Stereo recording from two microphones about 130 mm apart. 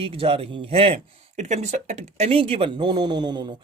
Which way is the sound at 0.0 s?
45° right (ahead or behind).